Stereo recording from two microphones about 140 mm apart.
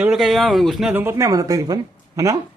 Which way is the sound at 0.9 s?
15° right (ahead or behind).